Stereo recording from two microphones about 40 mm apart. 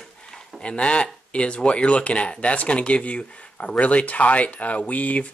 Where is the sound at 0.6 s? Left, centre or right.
Left.